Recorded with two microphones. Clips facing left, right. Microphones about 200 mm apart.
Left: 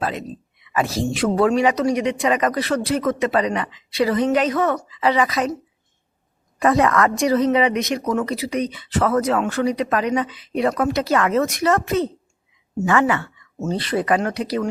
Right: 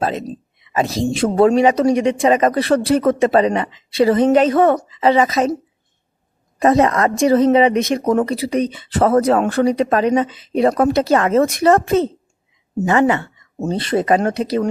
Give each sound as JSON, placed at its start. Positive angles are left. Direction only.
{"t": 0.0, "sound": "a woman's voice", "side_deg": -25}
{"t": 6.6, "sound": "a woman's voice", "side_deg": -25}
{"t": 13.3, "sound": "speech", "side_deg": -35}